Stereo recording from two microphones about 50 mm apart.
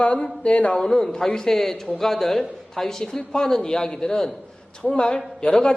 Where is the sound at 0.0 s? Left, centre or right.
Left.